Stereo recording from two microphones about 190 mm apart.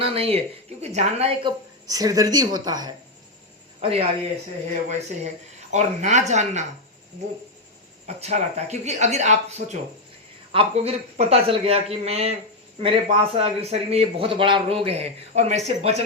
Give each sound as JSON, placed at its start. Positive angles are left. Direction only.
{"t": 0.0, "sound": "a man's voice", "side_deg": -30}
{"t": 8.0, "sound": "a man's voice", "side_deg": -35}